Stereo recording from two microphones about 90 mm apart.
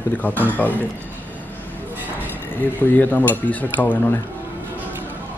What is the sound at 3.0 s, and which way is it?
Speech, 20° left (ahead or behind).